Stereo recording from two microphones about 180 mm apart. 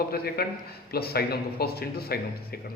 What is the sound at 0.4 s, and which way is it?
Speech, 60° left (ahead or behind).